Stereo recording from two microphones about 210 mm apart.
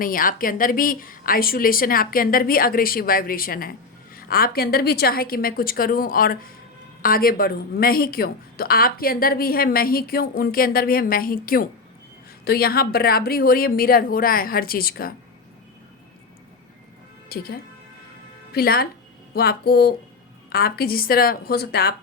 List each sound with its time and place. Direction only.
0.0 s a woman's voice: 40° left (ahead or behind)
17.2 s a woman's voice: 45° left (ahead or behind)